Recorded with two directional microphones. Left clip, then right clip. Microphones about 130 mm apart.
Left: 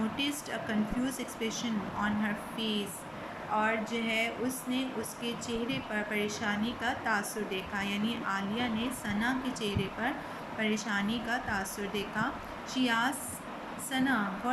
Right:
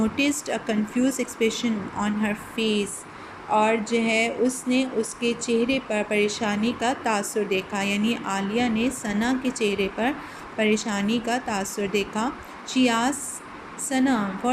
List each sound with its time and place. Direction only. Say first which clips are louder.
0.2 s a woman's voice: right 9 dB; 35° right (ahead or behind)